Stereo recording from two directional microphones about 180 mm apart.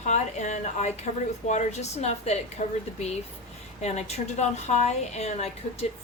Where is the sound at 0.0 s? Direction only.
40° left (ahead or behind).